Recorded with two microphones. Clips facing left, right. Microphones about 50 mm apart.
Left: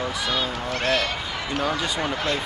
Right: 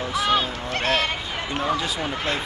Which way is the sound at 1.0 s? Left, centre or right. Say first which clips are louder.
Right 1 dB; right.